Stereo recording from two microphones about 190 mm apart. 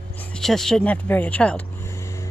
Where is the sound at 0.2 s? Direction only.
5° left (ahead or behind).